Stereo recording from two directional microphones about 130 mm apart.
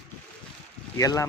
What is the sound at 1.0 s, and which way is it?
Speech, 25° left (ahead or behind).